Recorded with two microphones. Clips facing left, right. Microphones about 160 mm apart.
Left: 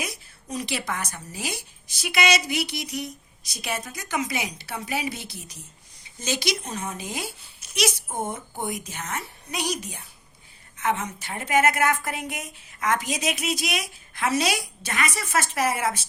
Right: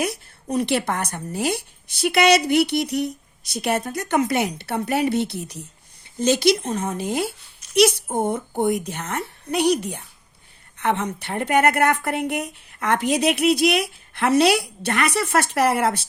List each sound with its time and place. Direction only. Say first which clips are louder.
0.0 s a woman's voice: right 9 dB; 60° right (ahead or behind)